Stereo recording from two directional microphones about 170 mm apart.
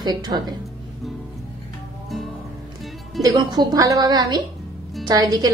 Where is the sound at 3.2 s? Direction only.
25° right (ahead or behind).